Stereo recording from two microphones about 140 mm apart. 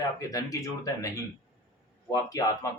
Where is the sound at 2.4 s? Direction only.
25° left (ahead or behind).